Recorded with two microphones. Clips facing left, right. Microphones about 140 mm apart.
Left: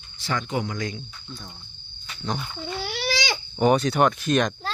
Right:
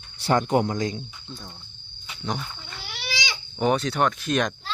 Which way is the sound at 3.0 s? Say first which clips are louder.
Left 5 dB; 45° left (ahead or behind).